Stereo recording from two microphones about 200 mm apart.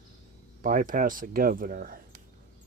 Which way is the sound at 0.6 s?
40° right (ahead or behind).